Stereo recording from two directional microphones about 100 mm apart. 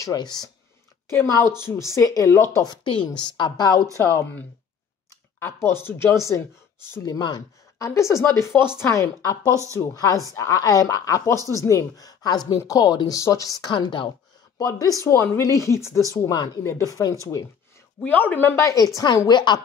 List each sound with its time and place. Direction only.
0.0 s speech: 40° left (ahead or behind)
1.1 s speech: 30° left (ahead or behind)
2.6 s a woman's voice: 50° left (ahead or behind)
3.9 s speech: 30° left (ahead or behind)
7.0 s speech: 40° left (ahead or behind)
13.7 s a woman's voice: 50° left (ahead or behind)
14.6 s speech: 35° left (ahead or behind)
18.0 s speech: 20° left (ahead or behind)
18.6 s speech: 30° left (ahead or behind)
19.2 s a woman's voice: 50° left (ahead or behind)